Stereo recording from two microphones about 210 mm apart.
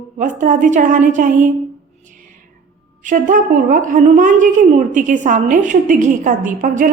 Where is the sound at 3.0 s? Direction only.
40° right (ahead or behind).